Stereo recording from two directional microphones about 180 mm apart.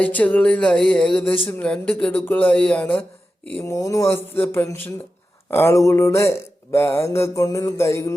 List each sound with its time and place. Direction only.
0.0 s speech: 10° left (ahead or behind)